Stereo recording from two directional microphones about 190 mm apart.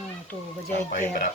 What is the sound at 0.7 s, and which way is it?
Speech, 50° left (ahead or behind).